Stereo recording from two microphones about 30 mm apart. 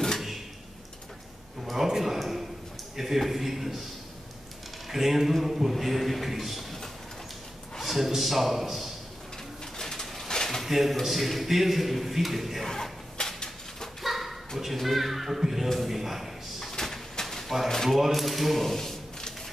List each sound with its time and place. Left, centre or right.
1.9 s a sound: centre
3.0 s speech: centre
4.8 s a man's voice: centre
7.8 s a man's voice: centre
9.8 s pigeon: centre
10.2 s a sound: centre
10.6 s a man's voice: centre
12.6 s whip: centre
14.0 s bow-wow: centre
14.6 s a man's voice: centre
16.7 s bird: centre
17.1 s a sound: centre
17.8 s a man's voice: centre